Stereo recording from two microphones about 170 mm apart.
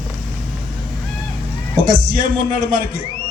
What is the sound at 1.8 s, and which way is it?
Speech, 55° right (ahead or behind).